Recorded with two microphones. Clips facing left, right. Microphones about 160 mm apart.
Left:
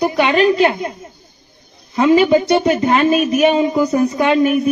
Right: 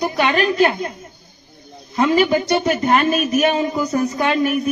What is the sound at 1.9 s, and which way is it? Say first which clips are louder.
Speech: left 5 dB; centre (ahead or behind).